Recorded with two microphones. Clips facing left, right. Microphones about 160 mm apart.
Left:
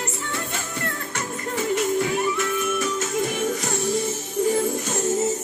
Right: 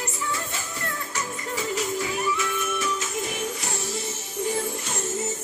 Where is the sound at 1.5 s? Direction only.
55° left (ahead or behind).